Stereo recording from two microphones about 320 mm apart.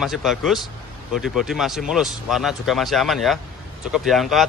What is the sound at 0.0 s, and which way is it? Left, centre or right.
Speech, centre.